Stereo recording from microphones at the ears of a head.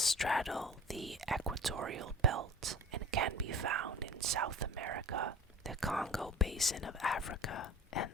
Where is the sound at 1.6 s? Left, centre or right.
Right.